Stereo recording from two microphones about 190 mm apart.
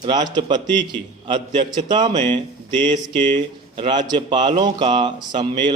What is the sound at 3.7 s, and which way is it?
A man's voice, 25° right (ahead or behind).